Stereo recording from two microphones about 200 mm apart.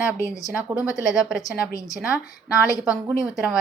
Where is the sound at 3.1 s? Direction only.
5° right (ahead or behind).